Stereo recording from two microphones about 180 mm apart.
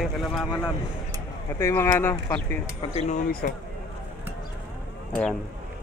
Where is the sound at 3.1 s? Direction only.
55° left (ahead or behind).